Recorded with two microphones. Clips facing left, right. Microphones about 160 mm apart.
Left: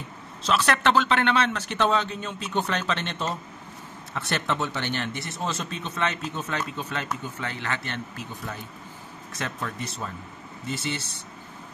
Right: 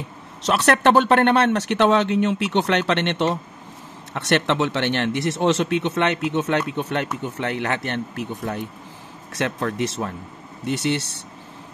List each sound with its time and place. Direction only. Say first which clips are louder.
0.4 s speech: right 5 dB; 65° right (ahead or behind)
9.8 s speech: right 9 dB; 90° right
10.6 s speech: right 9 dB; 70° right (ahead or behind)